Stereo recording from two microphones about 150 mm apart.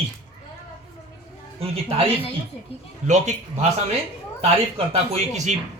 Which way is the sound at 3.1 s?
50° right (ahead or behind).